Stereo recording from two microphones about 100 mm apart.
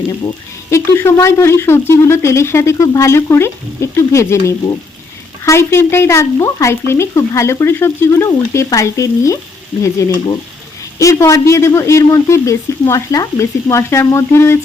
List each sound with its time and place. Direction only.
0.7 s speech: 25° left (ahead or behind)